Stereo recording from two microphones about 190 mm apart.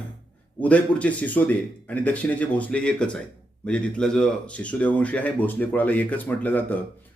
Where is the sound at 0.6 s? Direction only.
5° left (ahead or behind).